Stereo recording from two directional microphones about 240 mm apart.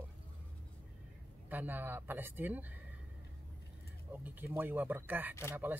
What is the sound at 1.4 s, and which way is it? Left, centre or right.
Speech, centre.